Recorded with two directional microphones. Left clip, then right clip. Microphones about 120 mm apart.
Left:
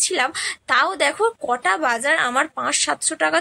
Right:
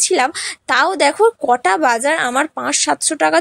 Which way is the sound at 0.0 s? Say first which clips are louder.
Right 5 dB; 35° right (ahead or behind).